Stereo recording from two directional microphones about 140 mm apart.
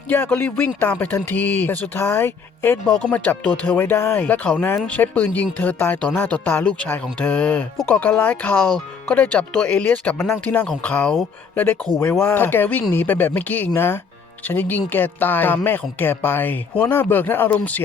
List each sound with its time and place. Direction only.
0.1 s speech: 15° left (ahead or behind)